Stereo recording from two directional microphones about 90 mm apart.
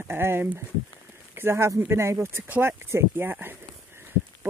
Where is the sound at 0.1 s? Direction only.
25° right (ahead or behind).